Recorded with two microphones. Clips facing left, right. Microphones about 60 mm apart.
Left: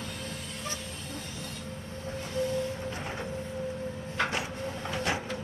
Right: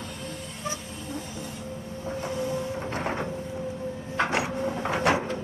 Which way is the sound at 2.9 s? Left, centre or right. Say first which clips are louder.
Right 7 dB; right.